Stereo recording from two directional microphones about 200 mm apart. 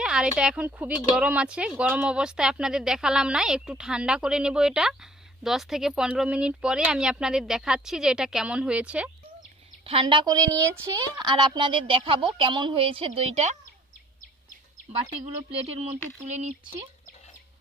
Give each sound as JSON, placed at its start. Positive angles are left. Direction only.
{"t": 0.0, "sound": "speech", "side_deg": -5}
{"t": 9.8, "sound": "speech", "side_deg": -25}
{"t": 15.5, "sound": "speech", "side_deg": -30}